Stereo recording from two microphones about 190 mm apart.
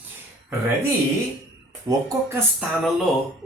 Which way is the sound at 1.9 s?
20° right (ahead or behind).